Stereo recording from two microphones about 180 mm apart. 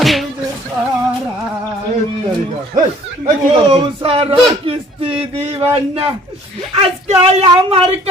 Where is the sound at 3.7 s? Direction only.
30° right (ahead or behind).